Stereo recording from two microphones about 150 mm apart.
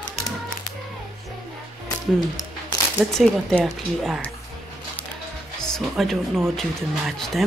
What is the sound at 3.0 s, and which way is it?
Speech, centre (ahead or behind).